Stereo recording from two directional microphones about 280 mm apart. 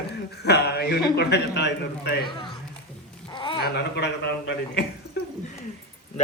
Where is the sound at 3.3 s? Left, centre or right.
Centre.